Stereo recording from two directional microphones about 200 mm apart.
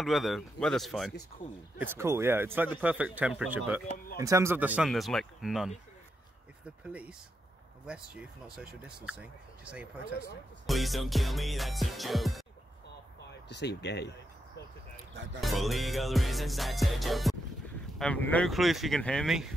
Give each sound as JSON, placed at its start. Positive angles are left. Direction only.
{"t": 0.0, "sound": "speech", "side_deg": 0}
{"t": 1.8, "sound": "speech", "side_deg": -15}
{"t": 6.8, "sound": "speech", "side_deg": -5}
{"t": 13.5, "sound": "speech", "side_deg": 60}
{"t": 15.4, "sound": "speech", "side_deg": 0}